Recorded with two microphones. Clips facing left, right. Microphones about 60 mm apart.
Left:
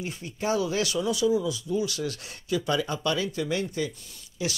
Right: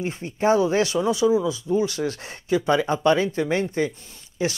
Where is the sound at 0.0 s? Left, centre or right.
Right.